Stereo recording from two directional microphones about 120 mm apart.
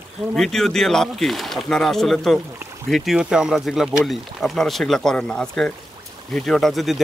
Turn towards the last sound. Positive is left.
turn(degrees=0)  # may be behind; listen again after turning